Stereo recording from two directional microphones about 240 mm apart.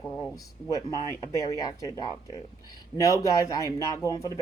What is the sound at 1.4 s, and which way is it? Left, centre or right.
Speech, centre.